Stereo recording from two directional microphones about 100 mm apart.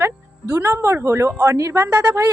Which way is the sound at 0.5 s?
25° right (ahead or behind).